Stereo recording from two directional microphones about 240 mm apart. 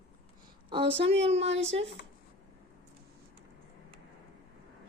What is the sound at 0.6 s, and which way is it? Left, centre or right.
Speech, right.